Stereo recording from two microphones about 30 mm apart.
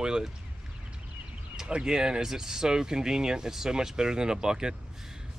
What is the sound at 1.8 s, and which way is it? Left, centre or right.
Speech, right.